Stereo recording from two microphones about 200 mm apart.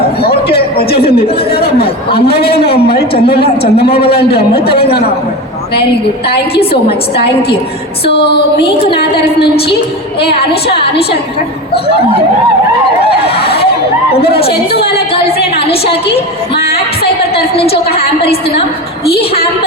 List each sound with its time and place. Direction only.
0.4 s a sound: 30° left (ahead or behind)
1.2 s a woman's voice: 30° left (ahead or behind)
2.4 s a man's voice: 50° left (ahead or behind)
3.3 s a woman's voice: 30° left (ahead or behind)
3.8 s a man's voice: 50° left (ahead or behind)
6.6 s a woman's voice: 30° left (ahead or behind)
8.1 s a woman's voice: 55° left (ahead or behind)
9.4 s a woman's voice: 55° left (ahead or behind)
10.5 s a woman's voice: 30° left (ahead or behind)
14.9 s a woman's voice: 30° left (ahead or behind)
17.8 s a woman's voice: 30° left (ahead or behind)